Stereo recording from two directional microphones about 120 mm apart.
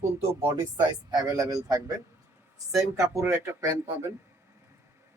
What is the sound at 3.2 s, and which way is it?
Speech, 20° right (ahead or behind).